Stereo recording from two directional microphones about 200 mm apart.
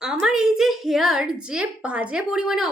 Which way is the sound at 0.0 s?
Centre (ahead or behind).